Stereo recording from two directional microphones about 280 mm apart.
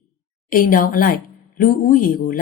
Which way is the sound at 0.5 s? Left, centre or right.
Left.